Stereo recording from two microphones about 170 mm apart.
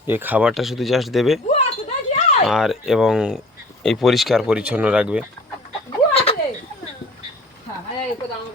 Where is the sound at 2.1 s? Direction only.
40° left (ahead or behind).